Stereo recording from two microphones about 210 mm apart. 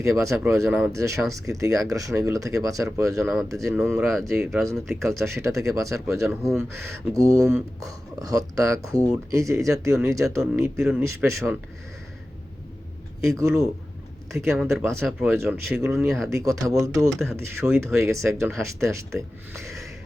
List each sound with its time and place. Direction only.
0.5 s speech: 10° right (ahead or behind)
3.2 s speech: 5° right (ahead or behind)
3.5 s speech: 15° right (ahead or behind)
3.8 s speech: 5° right (ahead or behind)
5.4 s speech: 15° right (ahead or behind)
13.3 s speech: 15° right (ahead or behind)
14.3 s speech: centre (ahead or behind)
16.3 s speech: 15° right (ahead or behind)